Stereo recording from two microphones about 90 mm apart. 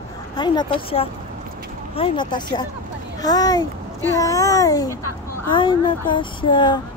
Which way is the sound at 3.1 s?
45° left (ahead or behind).